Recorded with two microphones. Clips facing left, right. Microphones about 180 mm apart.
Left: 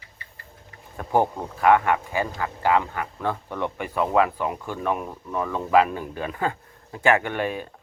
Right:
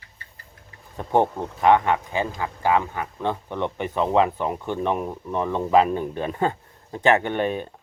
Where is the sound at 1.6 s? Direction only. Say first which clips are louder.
Right 1 dB; 20° right (ahead or behind).